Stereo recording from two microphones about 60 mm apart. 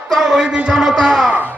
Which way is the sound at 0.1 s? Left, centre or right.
Centre.